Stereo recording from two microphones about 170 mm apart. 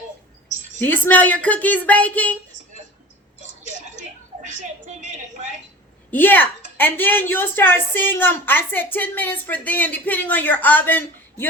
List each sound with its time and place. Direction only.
0.8 s a woman's voice: 10° left (ahead or behind)
3.4 s a sound: 45° right (ahead or behind)
6.1 s a woman's voice: 10° left (ahead or behind)